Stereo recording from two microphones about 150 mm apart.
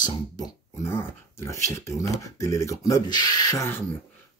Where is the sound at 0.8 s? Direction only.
15° left (ahead or behind).